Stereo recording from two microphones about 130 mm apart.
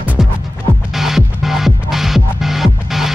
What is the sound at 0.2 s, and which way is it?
Music, 5° right (ahead or behind).